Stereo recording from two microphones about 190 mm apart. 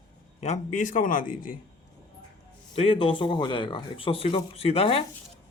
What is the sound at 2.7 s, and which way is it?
Speech, 30° left (ahead or behind).